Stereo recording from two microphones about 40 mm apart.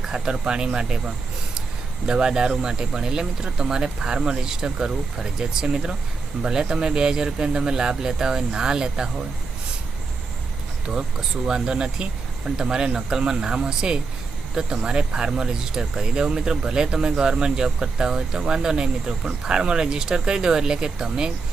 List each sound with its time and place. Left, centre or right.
0.1 s speech: right
10.8 s speech: centre